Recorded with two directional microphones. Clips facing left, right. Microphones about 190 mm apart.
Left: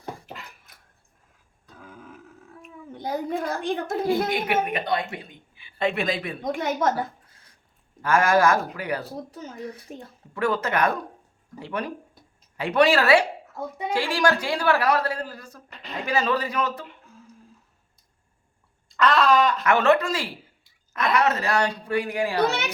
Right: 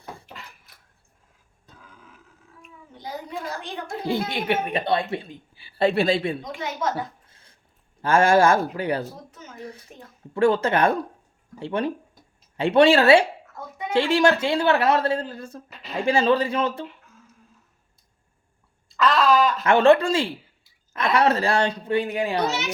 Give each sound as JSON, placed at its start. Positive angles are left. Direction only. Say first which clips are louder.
{"t": 2.6, "sound": "a sound", "louder": "left 6 dB", "side_deg": 50}
{"t": 4.3, "sound": "a woman's voice", "louder": "even", "side_deg": -30}
{"t": 6.4, "sound": "a woman's voice", "louder": "left 4 dB", "side_deg": 50}
{"t": 8.0, "sound": "a woman's voice", "louder": "right 2 dB", "side_deg": -30}
{"t": 9.3, "sound": "speech", "louder": "left 4 dB", "side_deg": 35}
{"t": 10.3, "sound": "a woman's voice", "louder": "right 5 dB", "side_deg": -30}
{"t": 15.7, "sound": "a sound", "louder": "right 1 dB", "side_deg": 0}
{"t": 16.0, "sound": "a woman's voice", "louder": "right 5 dB", "side_deg": -30}
{"t": 18.9, "sound": "speech", "louder": "even", "side_deg": 0}
{"t": 19.6, "sound": "a woman's voice", "louder": "right 4 dB", "side_deg": -30}